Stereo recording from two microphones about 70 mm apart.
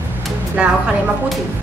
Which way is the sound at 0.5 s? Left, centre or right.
Centre.